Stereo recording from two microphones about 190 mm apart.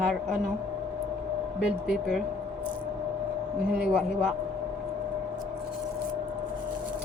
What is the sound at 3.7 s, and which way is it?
Speech, 5° right (ahead or behind).